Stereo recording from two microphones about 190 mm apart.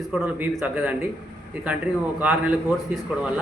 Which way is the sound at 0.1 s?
5° right (ahead or behind).